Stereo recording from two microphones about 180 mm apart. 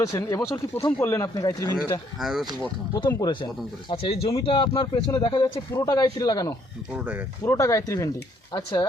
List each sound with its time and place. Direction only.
0.0 s speech: 15° left (ahead or behind)
2.1 s speech: centre (ahead or behind)
2.9 s speech: 20° left (ahead or behind)
6.9 s speech: 10° right (ahead or behind)
7.4 s speech: 15° left (ahead or behind)